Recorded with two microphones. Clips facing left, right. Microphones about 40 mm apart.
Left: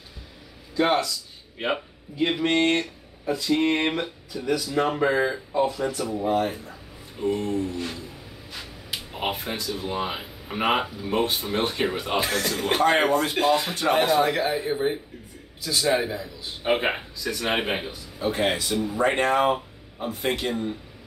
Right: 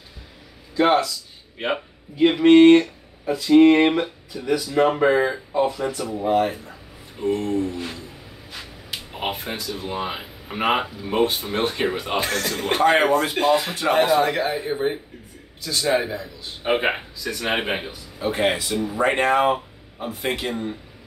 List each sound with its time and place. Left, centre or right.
0.7 s speech: centre
6.5 s speech: centre